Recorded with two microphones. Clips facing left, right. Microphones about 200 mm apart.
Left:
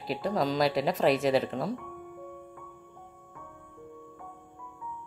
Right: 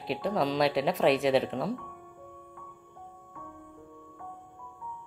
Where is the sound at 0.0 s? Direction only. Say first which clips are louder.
Even; centre (ahead or behind).